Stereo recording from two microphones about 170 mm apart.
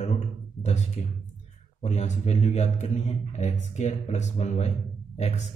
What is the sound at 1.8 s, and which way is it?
Speech, 40° left (ahead or behind).